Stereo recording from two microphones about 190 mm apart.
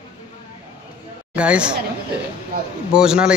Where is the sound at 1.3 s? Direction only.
5° right (ahead or behind).